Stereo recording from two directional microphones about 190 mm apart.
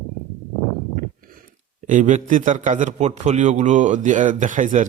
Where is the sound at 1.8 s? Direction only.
40° right (ahead or behind).